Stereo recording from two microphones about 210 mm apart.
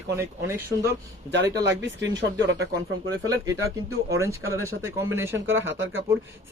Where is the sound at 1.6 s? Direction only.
55° right (ahead or behind).